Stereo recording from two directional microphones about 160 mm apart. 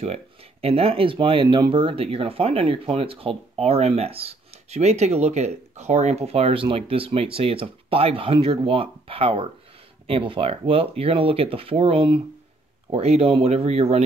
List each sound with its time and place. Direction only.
0.0 s speech: 40° right (ahead or behind)